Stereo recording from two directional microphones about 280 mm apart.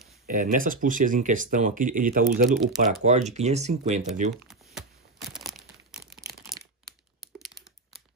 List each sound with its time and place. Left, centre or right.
0.3 s speech: right
5.3 s a sound: centre
7.2 s typing: centre